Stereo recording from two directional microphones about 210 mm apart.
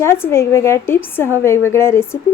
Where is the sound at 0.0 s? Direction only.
10° left (ahead or behind).